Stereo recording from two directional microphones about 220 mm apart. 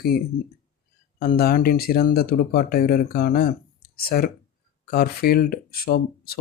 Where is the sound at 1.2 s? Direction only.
45° left (ahead or behind).